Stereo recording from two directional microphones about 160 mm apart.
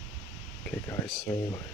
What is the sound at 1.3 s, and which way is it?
Speech, 15° left (ahead or behind).